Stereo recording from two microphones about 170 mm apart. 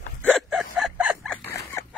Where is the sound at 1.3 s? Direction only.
15° left (ahead or behind).